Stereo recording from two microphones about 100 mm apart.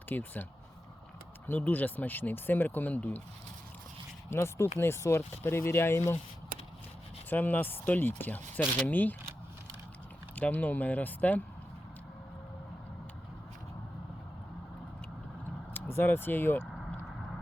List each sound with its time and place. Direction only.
0.1 s speech: 20° left (ahead or behind)
1.5 s speech: 15° left (ahead or behind)
4.3 s speech: 25° left (ahead or behind)
7.3 s speech: 15° left (ahead or behind)
10.3 s speech: 15° left (ahead or behind)
15.7 s speech: 20° left (ahead or behind)